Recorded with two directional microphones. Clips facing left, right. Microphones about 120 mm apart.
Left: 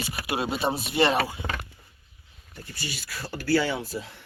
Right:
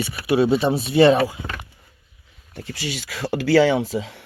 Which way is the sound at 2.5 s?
85° right.